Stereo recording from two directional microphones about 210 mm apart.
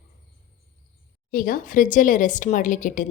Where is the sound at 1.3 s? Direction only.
40° left (ahead or behind).